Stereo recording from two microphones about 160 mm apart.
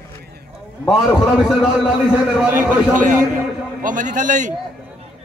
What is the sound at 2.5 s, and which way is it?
A man's voice, 55° right (ahead or behind).